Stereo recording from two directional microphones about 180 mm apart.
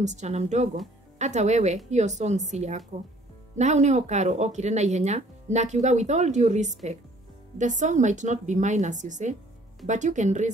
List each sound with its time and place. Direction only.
0.0 s a woman's voice: 40° right (ahead or behind)